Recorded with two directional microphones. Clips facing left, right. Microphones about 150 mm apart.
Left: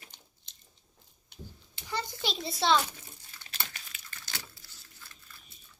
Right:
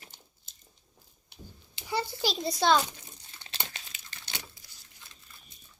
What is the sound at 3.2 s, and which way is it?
Crumpling, 25° right (ahead or behind).